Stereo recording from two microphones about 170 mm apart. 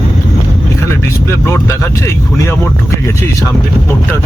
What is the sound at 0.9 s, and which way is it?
Speech, 15° left (ahead or behind).